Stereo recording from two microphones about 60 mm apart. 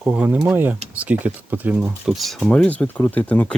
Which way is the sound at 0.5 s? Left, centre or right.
Right.